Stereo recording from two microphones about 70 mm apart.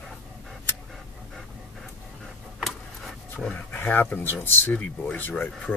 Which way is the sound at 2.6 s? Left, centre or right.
Centre.